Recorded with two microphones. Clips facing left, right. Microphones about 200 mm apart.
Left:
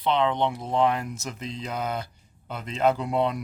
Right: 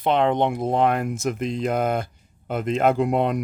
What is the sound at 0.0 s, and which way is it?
Speech, 50° right (ahead or behind).